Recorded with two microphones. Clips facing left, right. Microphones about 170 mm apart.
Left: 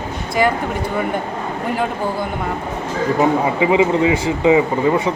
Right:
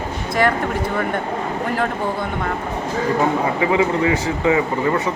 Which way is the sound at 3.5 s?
20° left (ahead or behind).